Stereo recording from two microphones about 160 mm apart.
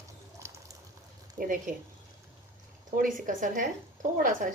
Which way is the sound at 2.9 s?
55° right (ahead or behind).